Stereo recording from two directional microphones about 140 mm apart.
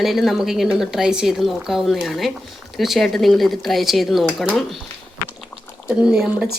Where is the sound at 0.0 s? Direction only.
Centre (ahead or behind).